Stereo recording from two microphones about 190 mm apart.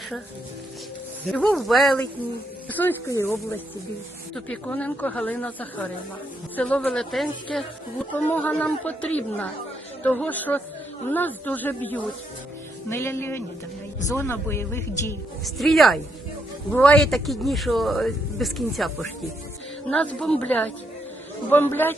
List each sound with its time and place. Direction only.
1.3 s a man's voice: 5° left (ahead or behind)
4.4 s a woman's voice: 5° left (ahead or behind)
15.4 s a man's voice: centre (ahead or behind)